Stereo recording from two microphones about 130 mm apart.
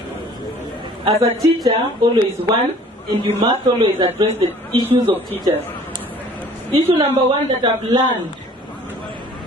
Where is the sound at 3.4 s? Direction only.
35° right (ahead or behind).